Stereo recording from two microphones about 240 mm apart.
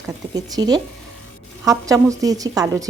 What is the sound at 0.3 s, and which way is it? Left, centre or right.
A woman's voice, centre.